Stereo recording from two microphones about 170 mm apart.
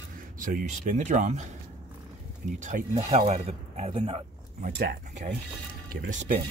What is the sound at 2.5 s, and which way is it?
Speech, 45° right (ahead or behind).